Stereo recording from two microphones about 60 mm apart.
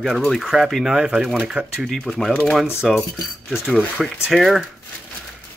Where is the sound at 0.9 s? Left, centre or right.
Centre.